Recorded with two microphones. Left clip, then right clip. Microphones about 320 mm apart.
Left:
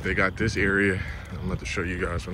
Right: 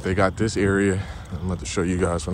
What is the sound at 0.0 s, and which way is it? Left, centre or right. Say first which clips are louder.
Speech: right 3 dB; centre.